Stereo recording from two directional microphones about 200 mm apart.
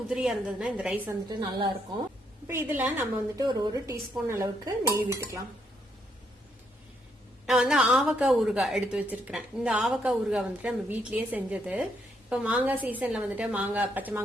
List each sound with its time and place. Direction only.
0.1 s a woman's voice: 5° right (ahead or behind)
1.3 s a woman's voice: 25° right (ahead or behind)
2.5 s a woman's voice: 10° right (ahead or behind)
3.3 s a woman's voice: 20° right (ahead or behind)
7.4 s a woman's voice: 5° right (ahead or behind)